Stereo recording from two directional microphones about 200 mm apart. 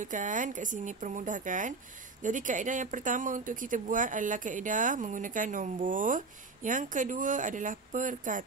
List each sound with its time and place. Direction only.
0.0 s speech: 40° right (ahead or behind)